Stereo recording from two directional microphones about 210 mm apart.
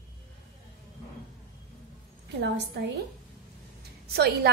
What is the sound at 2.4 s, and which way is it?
Speech, 55° right (ahead or behind).